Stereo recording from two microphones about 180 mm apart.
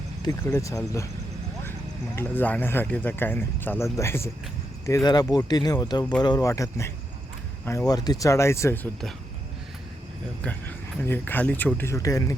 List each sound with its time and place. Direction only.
0.2 s speech: 15° left (ahead or behind)
2.1 s speech: 10° left (ahead or behind)
10.4 s speech: 10° left (ahead or behind)